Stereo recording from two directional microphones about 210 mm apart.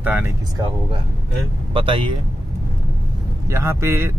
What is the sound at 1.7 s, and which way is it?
Speech, 25° right (ahead or behind).